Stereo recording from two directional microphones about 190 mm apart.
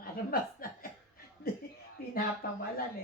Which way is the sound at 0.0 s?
50° left (ahead or behind).